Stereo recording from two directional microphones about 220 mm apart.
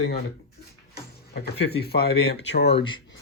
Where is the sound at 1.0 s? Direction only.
45° left (ahead or behind).